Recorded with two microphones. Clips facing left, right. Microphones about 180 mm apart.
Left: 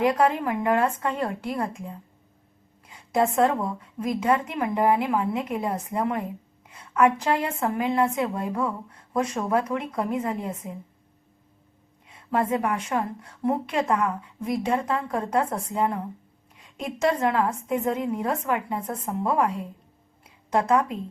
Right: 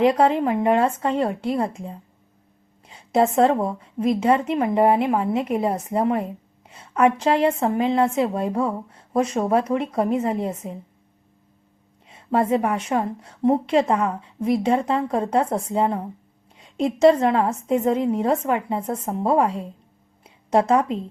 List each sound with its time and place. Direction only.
0.0 s a woman's voice: 25° right (ahead or behind)
12.0 s a woman's voice: 25° right (ahead or behind)